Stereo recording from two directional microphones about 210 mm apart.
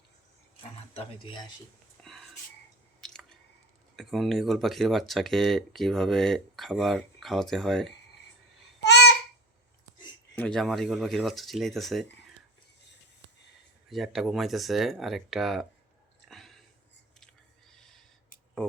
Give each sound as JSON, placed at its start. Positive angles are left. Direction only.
{"t": 0.9, "sound": "speech", "side_deg": 25}
{"t": 2.1, "sound": "whispering", "side_deg": 0}
{"t": 3.0, "sound": "chewing", "side_deg": 5}
{"t": 3.9, "sound": "speech", "side_deg": 0}
{"t": 10.3, "sound": "speech", "side_deg": 5}
{"t": 13.9, "sound": "speech", "side_deg": 0}
{"t": 16.3, "sound": "a sound", "side_deg": 0}